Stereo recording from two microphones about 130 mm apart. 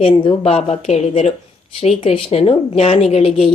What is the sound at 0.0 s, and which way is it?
Speech, 45° left (ahead or behind).